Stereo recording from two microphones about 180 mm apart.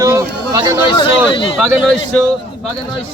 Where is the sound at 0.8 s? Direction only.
25° left (ahead or behind).